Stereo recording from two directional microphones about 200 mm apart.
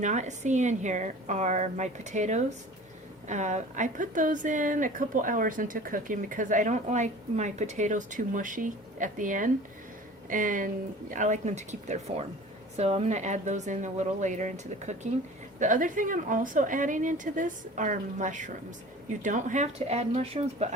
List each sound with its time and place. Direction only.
0.0 s a woman's voice: 35° right (ahead or behind)